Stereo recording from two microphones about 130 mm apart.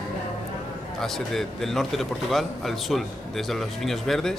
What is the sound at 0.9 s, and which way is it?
Speech, centre (ahead or behind).